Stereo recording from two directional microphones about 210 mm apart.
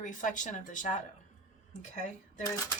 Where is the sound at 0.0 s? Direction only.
35° left (ahead or behind).